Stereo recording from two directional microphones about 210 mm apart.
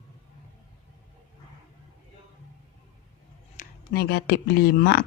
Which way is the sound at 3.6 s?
50° left (ahead or behind).